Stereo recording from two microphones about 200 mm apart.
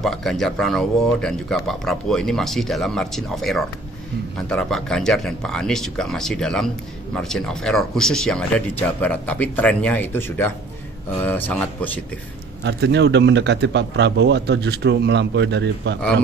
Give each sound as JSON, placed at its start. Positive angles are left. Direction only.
{"t": 0.0, "sound": "speech", "side_deg": 0}
{"t": 12.6, "sound": "a man's voice", "side_deg": -60}